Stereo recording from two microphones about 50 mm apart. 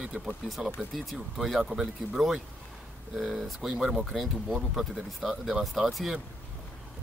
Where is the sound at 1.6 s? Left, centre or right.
Centre.